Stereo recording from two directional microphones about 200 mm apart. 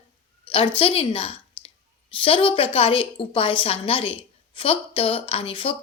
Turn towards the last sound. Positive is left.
turn(degrees=25)  # may be behind; listen again after turning